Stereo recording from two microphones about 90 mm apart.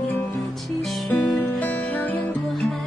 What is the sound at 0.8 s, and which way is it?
Music, centre (ahead or behind).